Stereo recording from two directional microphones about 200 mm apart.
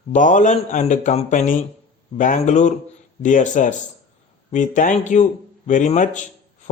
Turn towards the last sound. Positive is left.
turn(degrees=40)  # may be behind; listen again after turning